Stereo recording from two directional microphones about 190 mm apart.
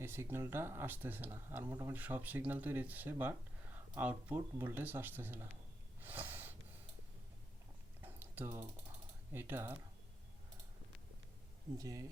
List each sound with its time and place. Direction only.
0.0 s speech: 15° right (ahead or behind)
6.0 s snort: 10° right (ahead or behind)
8.0 s a sound: 10° right (ahead or behind)
9.3 s speech: 10° right (ahead or behind)
11.8 s speech: 15° right (ahead or behind)